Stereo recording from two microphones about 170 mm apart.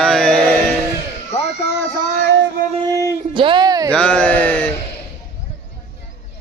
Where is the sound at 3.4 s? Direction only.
30° right (ahead or behind).